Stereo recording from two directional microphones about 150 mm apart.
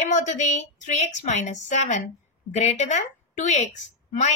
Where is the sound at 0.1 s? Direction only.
55° left (ahead or behind).